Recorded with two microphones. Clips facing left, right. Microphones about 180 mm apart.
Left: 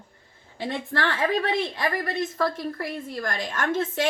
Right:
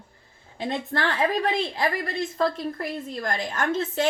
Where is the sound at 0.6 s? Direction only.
20° right (ahead or behind).